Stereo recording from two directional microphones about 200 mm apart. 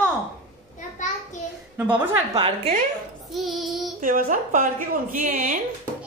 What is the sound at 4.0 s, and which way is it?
A woman's voice, 45° right (ahead or behind).